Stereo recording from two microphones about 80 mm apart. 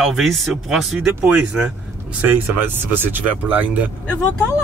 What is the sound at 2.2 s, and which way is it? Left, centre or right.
Speech, right.